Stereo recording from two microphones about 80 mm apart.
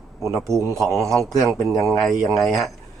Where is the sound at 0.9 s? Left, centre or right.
Right.